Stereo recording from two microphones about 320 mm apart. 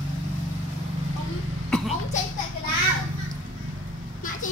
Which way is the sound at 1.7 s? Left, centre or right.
Centre.